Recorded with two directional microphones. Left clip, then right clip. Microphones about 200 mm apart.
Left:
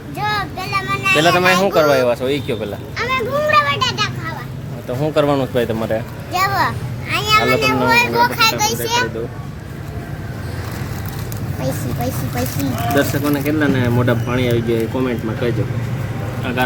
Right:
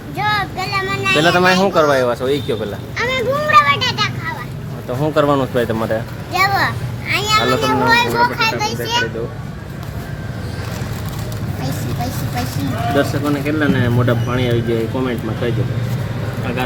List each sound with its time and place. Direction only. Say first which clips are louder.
0.2 s a sound: right 3 dB; 15° left (ahead or behind)
1.2 s speech: right 1 dB; 5° right (ahead or behind)
3.0 s children playing: right 1 dB; 10° left (ahead or behind)
4.9 s speech: right 1 dB; 5° right (ahead or behind)
6.3 s a sound: right 1 dB; 15° left (ahead or behind)
8.2 s a child's voice: left 1 dB; 45° left (ahead or behind)
13.0 s speech: even; centre (ahead or behind)